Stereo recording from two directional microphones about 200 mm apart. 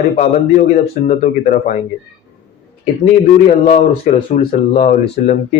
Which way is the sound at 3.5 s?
40° left (ahead or behind).